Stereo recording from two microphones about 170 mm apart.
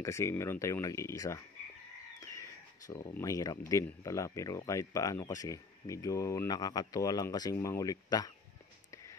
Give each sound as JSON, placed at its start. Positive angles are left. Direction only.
{"t": 0.0, "sound": "speech", "side_deg": 15}